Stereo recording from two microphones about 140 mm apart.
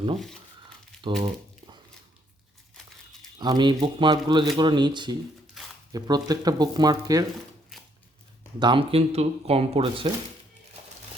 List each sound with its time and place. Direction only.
0.9 s crumpling: 5° left (ahead or behind)
3.3 s speech: 30° right (ahead or behind)
7.7 s a sound: centre (ahead or behind)
8.5 s speech: 35° right (ahead or behind)